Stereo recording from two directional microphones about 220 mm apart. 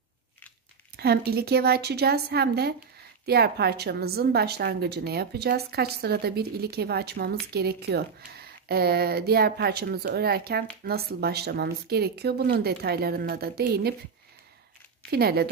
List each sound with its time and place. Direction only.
0.9 s a woman's voice: 45° right (ahead or behind)
15.0 s a woman's voice: 45° right (ahead or behind)